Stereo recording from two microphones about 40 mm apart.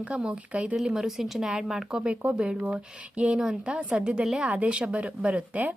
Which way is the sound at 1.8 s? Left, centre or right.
Right.